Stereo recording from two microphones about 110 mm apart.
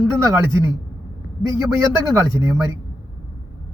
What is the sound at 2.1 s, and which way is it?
Speech, 30° right (ahead or behind).